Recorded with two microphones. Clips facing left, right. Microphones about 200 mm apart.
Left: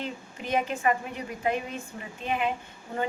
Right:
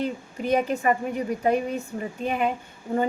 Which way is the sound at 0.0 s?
40° right (ahead or behind).